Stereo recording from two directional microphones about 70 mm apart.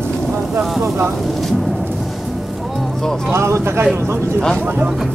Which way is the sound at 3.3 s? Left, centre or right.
Right.